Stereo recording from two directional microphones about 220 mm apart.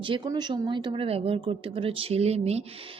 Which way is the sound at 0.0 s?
20° right (ahead or behind).